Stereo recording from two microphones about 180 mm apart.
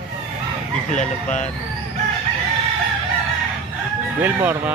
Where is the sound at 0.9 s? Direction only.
40° left (ahead or behind).